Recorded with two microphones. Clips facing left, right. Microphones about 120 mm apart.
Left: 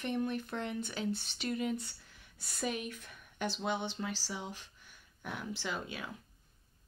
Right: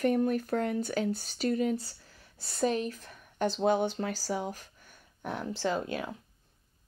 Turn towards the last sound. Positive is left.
turn(degrees=-40)  # may be behind; listen again after turning